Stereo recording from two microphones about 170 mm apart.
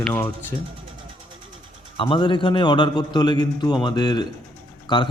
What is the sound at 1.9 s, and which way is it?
A man's voice, 30° left (ahead or behind).